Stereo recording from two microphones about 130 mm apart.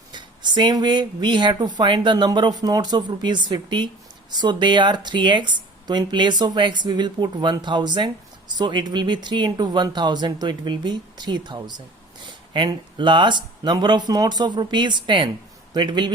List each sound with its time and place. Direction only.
0.1 s speech: 35° right (ahead or behind)